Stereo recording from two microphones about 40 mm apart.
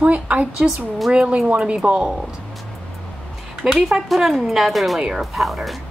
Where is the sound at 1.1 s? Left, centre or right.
Right.